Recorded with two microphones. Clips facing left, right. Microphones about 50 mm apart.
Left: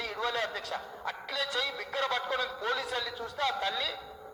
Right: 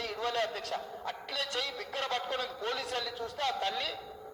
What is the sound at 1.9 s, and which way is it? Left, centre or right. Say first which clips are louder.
A man's voice: left 3 dB; left.